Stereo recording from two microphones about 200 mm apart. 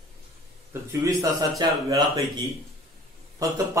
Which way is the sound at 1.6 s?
20° right (ahead or behind).